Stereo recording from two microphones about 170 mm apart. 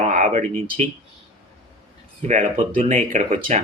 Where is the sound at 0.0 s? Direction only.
45° right (ahead or behind).